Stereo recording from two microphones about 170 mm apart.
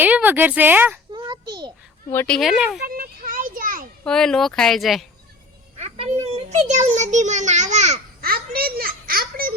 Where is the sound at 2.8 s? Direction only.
60° right (ahead or behind).